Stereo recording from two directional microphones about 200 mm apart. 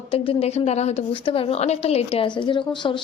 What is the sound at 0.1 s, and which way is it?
Speech, 30° left (ahead or behind).